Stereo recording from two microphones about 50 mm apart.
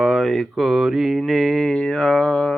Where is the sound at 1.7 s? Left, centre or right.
Centre.